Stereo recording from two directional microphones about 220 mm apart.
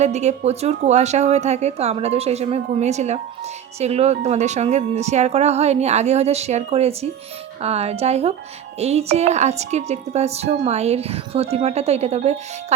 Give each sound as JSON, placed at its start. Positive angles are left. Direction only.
{"t": 0.0, "sound": "speech", "side_deg": -30}